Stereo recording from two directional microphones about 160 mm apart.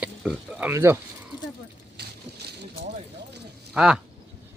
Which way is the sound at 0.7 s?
15° right (ahead or behind).